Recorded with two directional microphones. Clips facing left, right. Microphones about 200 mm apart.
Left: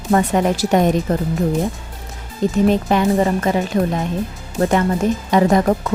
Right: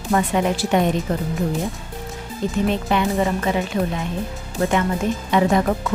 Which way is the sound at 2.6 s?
40° left (ahead or behind).